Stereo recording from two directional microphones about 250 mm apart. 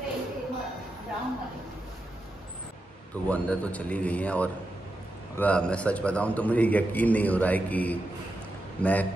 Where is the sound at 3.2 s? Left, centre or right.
Centre.